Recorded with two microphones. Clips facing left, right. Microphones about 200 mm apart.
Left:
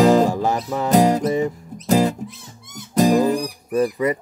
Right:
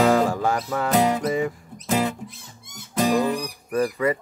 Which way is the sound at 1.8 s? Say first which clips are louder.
Left 6 dB; 40° left (ahead or behind).